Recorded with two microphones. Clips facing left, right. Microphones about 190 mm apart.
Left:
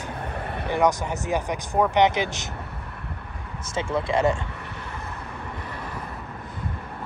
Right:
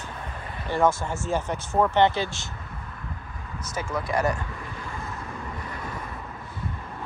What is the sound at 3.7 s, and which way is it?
Speech, 25° left (ahead or behind).